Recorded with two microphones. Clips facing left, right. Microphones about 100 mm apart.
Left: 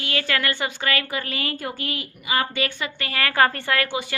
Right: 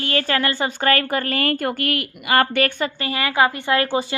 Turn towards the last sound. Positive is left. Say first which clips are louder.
# right 6 dB
turn(degrees=-35)  # may be behind; listen again after turning